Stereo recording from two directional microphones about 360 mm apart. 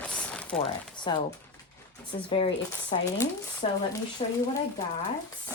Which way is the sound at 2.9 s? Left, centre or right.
Centre.